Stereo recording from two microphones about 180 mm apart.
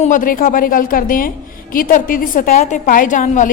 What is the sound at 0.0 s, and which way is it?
A woman's voice, 45° left (ahead or behind).